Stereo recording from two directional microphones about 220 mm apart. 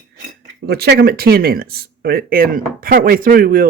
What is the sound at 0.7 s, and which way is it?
Speech, 45° right (ahead or behind).